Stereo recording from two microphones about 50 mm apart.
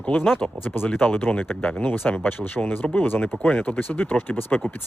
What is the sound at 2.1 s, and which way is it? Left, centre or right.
Speech, left.